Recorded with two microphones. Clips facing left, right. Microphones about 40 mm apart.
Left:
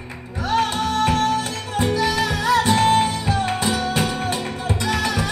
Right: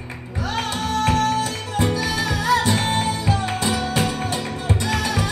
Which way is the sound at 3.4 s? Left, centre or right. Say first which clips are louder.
Left 1 dB; left.